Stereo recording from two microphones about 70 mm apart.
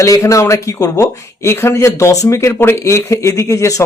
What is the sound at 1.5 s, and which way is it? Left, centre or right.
Speech, left.